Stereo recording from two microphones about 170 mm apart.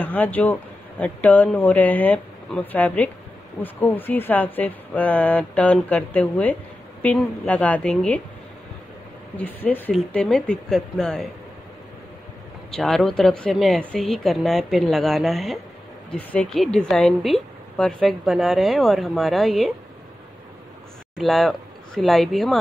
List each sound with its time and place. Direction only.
0.0 s speech: 10° left (ahead or behind)
9.4 s a woman's voice: 10° left (ahead or behind)
12.7 s a woman's voice: 5° left (ahead or behind)
21.2 s speech: centre (ahead or behind)